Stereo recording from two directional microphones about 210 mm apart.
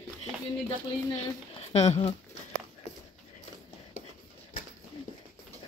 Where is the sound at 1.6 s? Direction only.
30° left (ahead or behind).